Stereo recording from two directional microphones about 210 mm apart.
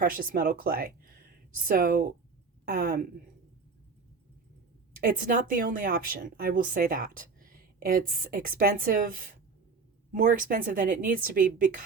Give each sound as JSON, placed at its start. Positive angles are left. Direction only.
{"t": 0.0, "sound": "speech", "side_deg": -45}
{"t": 4.9, "sound": "a woman's voice", "side_deg": -40}